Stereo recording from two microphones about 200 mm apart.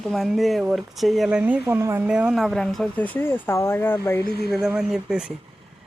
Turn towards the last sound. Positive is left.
turn(degrees=-5)  # may be behind; listen again after turning